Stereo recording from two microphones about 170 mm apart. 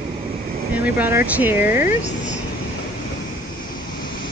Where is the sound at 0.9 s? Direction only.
10° right (ahead or behind).